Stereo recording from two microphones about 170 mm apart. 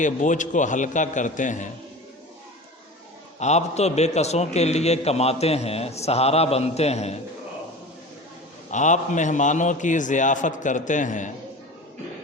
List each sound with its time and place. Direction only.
0.0 s a man's voice: 45° left (ahead or behind)
3.4 s a man's voice: 40° left (ahead or behind)
8.7 s a man's voice: 45° left (ahead or behind)